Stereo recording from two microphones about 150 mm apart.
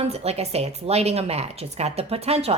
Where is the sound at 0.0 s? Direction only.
45° right (ahead or behind).